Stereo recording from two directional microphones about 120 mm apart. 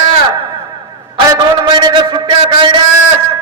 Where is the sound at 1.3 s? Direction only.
30° right (ahead or behind).